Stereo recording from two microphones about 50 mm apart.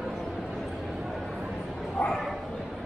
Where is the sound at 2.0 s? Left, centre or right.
Left.